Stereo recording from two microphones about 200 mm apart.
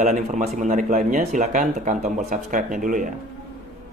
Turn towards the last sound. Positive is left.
turn(degrees=-40)  # may be behind; listen again after turning